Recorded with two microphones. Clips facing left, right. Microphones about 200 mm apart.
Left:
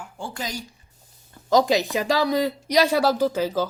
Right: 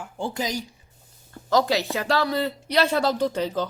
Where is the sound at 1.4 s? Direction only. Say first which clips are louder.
Left 3 dB; 15° left (ahead or behind).